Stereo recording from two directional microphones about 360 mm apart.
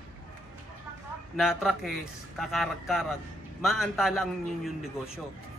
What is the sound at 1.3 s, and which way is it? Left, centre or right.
A man's voice, centre.